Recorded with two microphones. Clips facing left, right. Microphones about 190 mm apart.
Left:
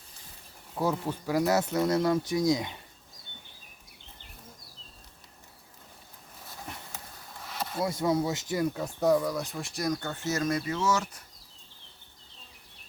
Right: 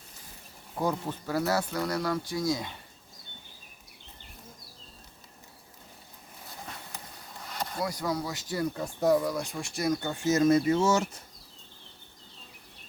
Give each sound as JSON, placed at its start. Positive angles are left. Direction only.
{"t": 0.8, "sound": "speech", "side_deg": 10}
{"t": 7.4, "sound": "a sound", "side_deg": 5}
{"t": 7.8, "sound": "speech", "side_deg": 25}
{"t": 8.6, "sound": "speech", "side_deg": 10}
{"t": 9.0, "sound": "speech", "side_deg": 0}